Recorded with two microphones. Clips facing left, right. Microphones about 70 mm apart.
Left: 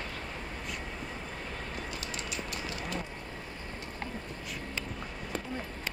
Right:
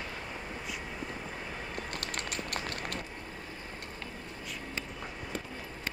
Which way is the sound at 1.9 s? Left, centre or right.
Right.